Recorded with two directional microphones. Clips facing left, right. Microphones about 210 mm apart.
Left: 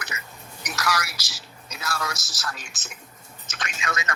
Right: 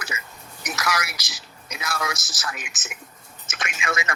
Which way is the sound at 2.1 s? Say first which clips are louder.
Right 1 dB; centre (ahead or behind).